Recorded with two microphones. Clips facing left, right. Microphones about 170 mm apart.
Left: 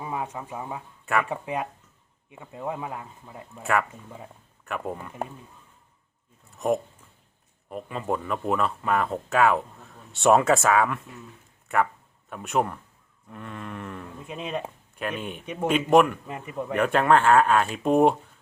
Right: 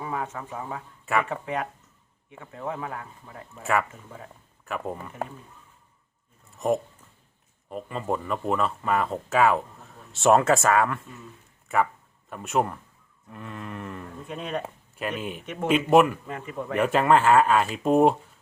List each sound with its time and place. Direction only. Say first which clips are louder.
0.0 s speech: even; 15° left (ahead or behind)
1.0 s speech: even; centre (ahead or behind)
1.3 s speech: even; 15° left (ahead or behind)
3.6 s speech: even; centre (ahead or behind)
6.6 s speech: even; centre (ahead or behind)
12.3 s speech: even; centre (ahead or behind)
14.3 s speech: even; 15° left (ahead or behind)
14.9 s speech: right 1 dB; 5° right (ahead or behind)
16.2 s speech: left 1 dB; 15° left (ahead or behind)
16.7 s speech: even; 5° right (ahead or behind)